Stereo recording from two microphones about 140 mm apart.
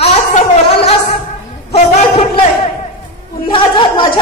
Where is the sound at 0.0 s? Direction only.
45° left (ahead or behind).